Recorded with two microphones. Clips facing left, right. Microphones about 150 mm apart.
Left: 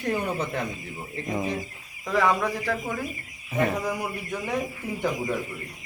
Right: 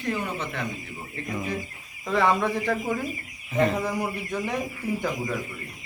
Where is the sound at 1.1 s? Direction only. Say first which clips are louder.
Left 3 dB; 30° left (ahead or behind).